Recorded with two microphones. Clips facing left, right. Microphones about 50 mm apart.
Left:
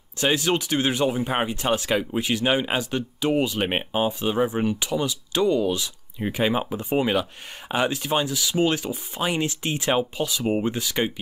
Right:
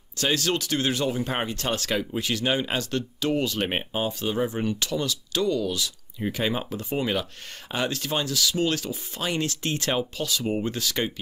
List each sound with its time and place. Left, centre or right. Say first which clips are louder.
0.2 s speech: left 3 dB; centre